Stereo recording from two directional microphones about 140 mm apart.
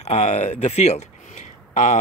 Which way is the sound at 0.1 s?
50° left (ahead or behind).